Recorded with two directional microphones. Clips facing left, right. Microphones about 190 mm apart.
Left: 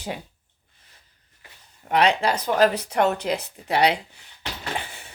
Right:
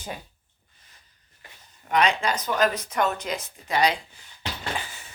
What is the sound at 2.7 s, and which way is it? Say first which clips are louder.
Speech: left 4 dB; 65° left (ahead or behind).